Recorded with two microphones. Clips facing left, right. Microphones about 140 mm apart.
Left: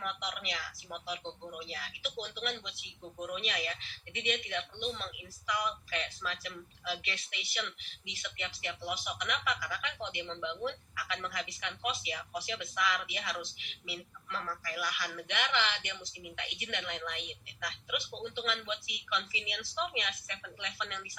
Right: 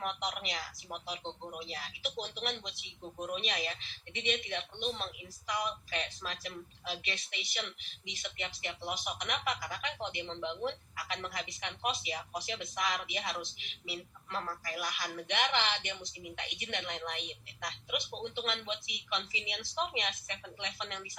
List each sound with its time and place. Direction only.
0.0 s speech: 40° right (ahead or behind)